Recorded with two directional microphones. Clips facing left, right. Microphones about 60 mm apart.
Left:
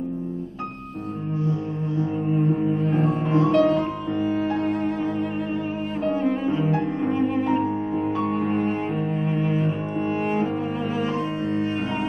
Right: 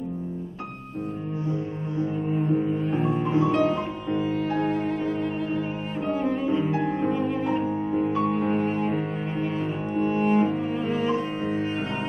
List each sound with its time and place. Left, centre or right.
3.1 s music: right
3.6 s music: centre
7.1 s music: centre
8.3 s cello: centre